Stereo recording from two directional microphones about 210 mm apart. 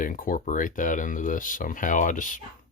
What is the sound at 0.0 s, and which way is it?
Speech, 40° left (ahead or behind).